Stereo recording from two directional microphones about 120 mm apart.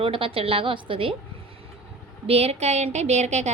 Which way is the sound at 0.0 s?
50° right (ahead or behind).